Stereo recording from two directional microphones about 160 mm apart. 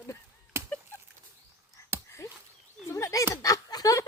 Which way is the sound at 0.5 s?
15° right (ahead or behind).